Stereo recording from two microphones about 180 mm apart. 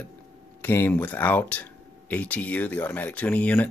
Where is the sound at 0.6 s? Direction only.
10° left (ahead or behind).